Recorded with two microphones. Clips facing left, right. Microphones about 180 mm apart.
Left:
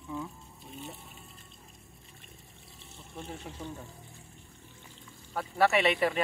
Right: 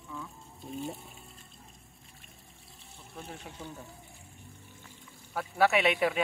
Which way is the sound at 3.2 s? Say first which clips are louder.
Left 2 dB; centre (ahead or behind).